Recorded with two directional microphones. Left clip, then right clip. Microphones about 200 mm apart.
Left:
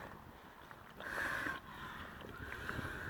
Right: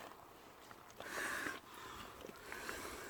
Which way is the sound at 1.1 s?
Centre (ahead or behind).